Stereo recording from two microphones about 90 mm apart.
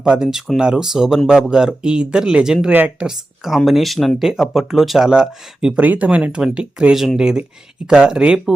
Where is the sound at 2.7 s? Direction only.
20° right (ahead or behind).